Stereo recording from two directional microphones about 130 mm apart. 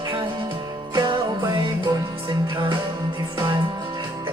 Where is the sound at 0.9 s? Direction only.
35° right (ahead or behind).